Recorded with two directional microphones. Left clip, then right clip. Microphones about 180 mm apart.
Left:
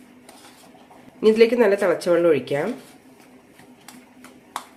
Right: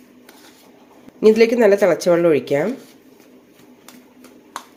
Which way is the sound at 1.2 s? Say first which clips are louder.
Right 3 dB; 30° right (ahead or behind).